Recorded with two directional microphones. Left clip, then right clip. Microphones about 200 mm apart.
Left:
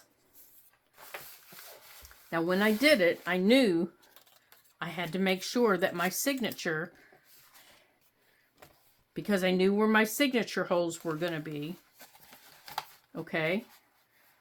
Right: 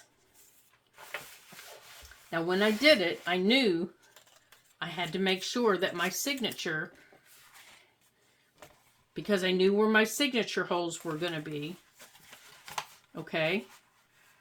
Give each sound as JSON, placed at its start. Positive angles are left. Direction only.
{"t": 2.3, "sound": "speech", "side_deg": 35}
{"t": 9.1, "sound": "speech", "side_deg": 35}
{"t": 13.2, "sound": "speech", "side_deg": 30}